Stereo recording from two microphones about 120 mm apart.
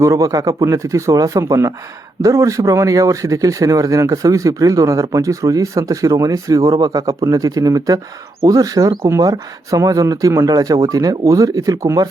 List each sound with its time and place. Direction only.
0.0 s speech: 25° right (ahead or behind)